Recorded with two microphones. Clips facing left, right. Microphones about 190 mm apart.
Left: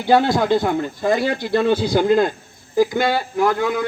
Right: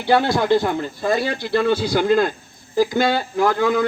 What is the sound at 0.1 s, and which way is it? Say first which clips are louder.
Speech: left 1 dB; 20° left (ahead or behind).